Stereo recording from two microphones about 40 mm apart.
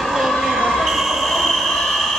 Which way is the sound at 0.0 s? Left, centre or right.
Centre.